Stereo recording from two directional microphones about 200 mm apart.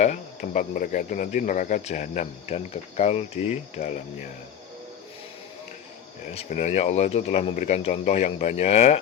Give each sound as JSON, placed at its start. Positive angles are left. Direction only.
{"t": 0.0, "sound": "speech", "side_deg": 40}
{"t": 6.3, "sound": "speech", "side_deg": 35}